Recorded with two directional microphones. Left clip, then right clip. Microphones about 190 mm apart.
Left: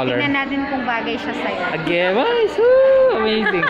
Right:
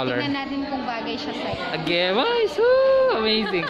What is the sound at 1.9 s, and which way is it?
Speech, 10° right (ahead or behind).